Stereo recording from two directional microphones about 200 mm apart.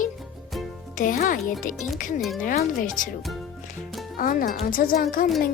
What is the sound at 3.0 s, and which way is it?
Speech, 40° left (ahead or behind).